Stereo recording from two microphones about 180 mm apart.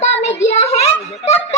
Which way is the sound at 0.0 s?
35° left (ahead or behind).